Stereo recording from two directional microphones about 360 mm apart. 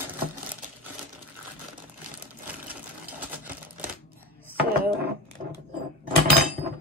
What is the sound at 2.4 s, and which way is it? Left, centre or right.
Sewing machine, centre.